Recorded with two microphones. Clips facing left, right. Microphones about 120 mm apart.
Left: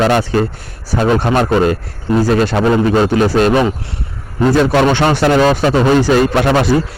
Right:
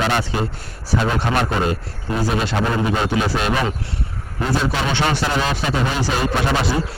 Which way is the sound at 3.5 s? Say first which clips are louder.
Left 8 dB; 25° left (ahead or behind).